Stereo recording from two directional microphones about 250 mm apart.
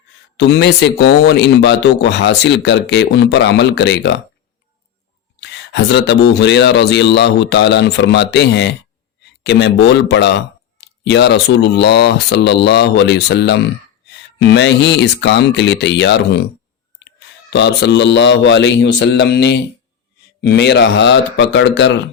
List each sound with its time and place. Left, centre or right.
0.3 s speech: left
5.4 s speech: left